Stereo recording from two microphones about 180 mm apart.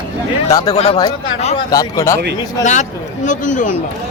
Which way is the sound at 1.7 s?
20° left (ahead or behind).